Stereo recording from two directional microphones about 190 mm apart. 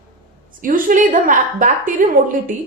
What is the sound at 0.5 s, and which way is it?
A woman's voice, 45° right (ahead or behind).